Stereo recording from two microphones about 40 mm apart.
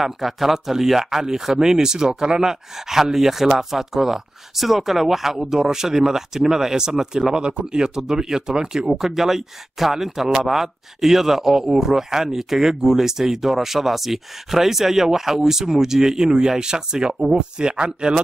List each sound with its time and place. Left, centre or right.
0.0 s speech: centre; by 18.2 s right